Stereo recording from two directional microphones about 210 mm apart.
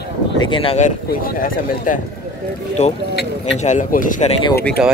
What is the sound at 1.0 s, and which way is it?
Speech, 45° left (ahead or behind).